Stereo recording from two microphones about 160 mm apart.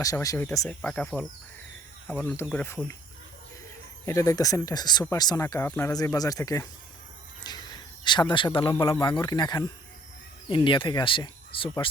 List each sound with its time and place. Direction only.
0.0 s speech: 20° left (ahead or behind)
0.7 s speech: 5° left (ahead or behind)
4.0 s speech: 20° left (ahead or behind)
7.4 s a sound: 25° left (ahead or behind)
8.8 s speech: 30° left (ahead or behind)